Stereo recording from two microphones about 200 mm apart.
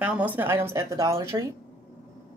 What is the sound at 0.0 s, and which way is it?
Speech, 5° right (ahead or behind).